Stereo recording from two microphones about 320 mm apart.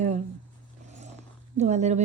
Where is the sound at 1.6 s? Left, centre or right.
Right.